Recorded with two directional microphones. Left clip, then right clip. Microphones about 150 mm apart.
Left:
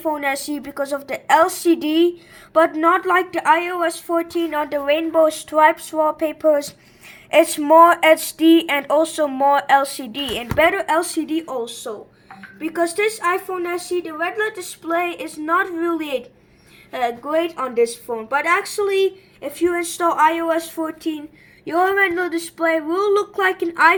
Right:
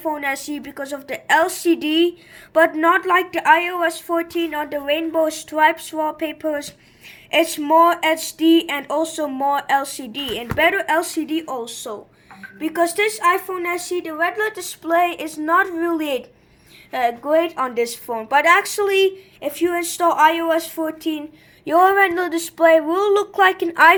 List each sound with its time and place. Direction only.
0.0 s a woman's voice: 10° left (ahead or behind)
11.6 s speech: 30° right (ahead or behind)
17.3 s speech: 35° right (ahead or behind); by 21.2 s 15° right (ahead or behind)
21.7 s speech: 25° right (ahead or behind)